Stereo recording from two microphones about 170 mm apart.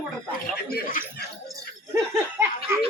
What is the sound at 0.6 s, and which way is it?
Speech, 55° left (ahead or behind).